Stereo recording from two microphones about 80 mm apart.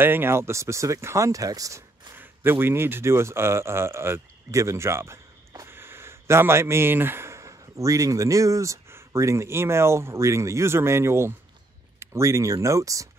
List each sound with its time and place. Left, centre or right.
0.0 s speech: right
2.1 s speech: right
5.7 s speech: right